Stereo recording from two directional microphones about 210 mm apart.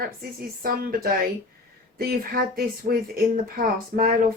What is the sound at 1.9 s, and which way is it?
Speech, 45° right (ahead or behind).